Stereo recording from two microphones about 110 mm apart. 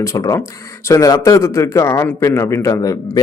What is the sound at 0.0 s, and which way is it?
Speech, 30° left (ahead or behind).